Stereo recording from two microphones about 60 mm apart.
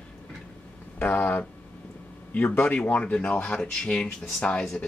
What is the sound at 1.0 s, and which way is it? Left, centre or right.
Speech, left.